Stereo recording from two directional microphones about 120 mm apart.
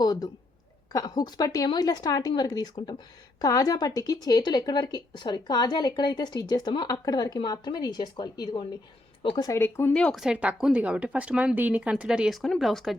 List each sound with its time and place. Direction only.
0.0 s a sound: 35° left (ahead or behind)
0.9 s speech: 35° left (ahead or behind)
9.6 s speech: 20° left (ahead or behind)
9.9 s speech: 10° left (ahead or behind)
10.2 s speech: 10° right (ahead or behind)